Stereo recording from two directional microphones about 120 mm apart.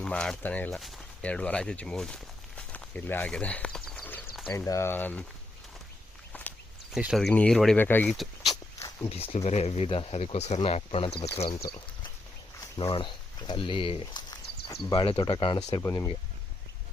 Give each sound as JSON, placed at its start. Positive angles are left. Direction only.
{"t": 0.0, "sound": "speech", "side_deg": 5}
{"t": 0.7, "sound": "speech", "side_deg": 0}
{"t": 1.2, "sound": "walk", "side_deg": 10}
{"t": 4.4, "sound": "speech", "side_deg": 25}
{"t": 6.3, "sound": "a sound", "side_deg": 10}
{"t": 6.9, "sound": "speech", "side_deg": -5}
{"t": 7.8, "sound": "speech", "side_deg": 15}
{"t": 8.1, "sound": "speech", "side_deg": 0}
{"t": 9.0, "sound": "speech", "side_deg": 55}
{"t": 11.4, "sound": "speech", "side_deg": 35}
{"t": 15.8, "sound": "speech", "side_deg": 30}